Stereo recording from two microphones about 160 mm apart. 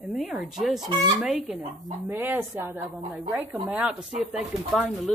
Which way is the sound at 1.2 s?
5° right (ahead or behind).